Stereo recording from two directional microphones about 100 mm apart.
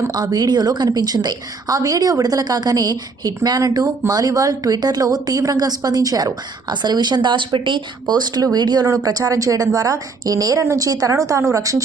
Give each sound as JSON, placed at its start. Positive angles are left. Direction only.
{"t": 0.1, "sound": "a woman's voice", "side_deg": -40}